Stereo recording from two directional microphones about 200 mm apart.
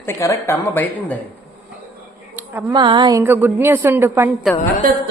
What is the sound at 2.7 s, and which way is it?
Speech, 25° right (ahead or behind).